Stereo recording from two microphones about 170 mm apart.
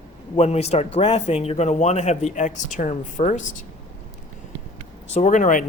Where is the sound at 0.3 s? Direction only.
40° left (ahead or behind).